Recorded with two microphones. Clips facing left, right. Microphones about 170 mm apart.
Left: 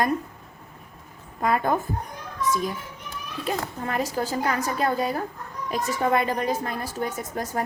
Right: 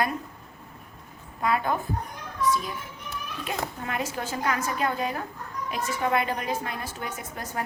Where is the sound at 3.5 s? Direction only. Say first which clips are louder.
Left 4 dB; 40° left (ahead or behind).